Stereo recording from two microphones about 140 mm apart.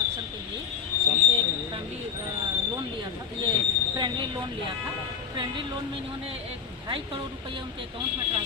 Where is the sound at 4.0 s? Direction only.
30° right (ahead or behind).